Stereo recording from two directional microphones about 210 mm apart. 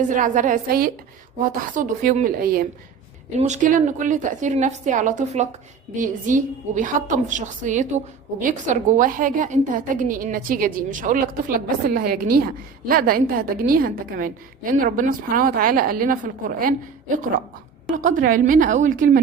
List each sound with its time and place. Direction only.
0.1 s a woman's voice: 40° right (ahead or behind)
3.3 s a woman's voice: 35° right (ahead or behind)